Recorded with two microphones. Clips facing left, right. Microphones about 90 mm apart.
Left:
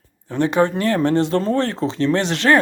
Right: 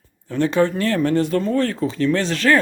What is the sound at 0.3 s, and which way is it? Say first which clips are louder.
Speech: left 1 dB; 20° left (ahead or behind).